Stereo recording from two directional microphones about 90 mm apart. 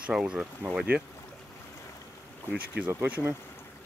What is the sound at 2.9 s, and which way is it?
Speech, 20° right (ahead or behind).